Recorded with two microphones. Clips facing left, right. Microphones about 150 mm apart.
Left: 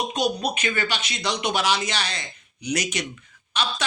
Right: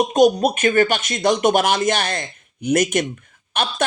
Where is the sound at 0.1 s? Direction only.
50° right (ahead or behind).